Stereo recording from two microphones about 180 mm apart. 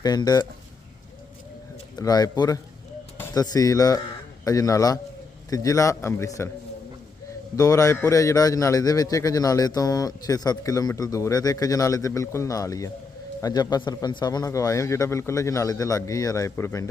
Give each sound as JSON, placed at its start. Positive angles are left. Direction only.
{"t": 0.0, "sound": "a man's voice", "side_deg": 20}
{"t": 2.0, "sound": "a man's voice", "side_deg": 20}
{"t": 7.5, "sound": "a man's voice", "side_deg": 20}